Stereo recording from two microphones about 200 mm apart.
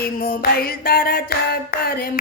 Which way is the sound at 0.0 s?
50° left (ahead or behind).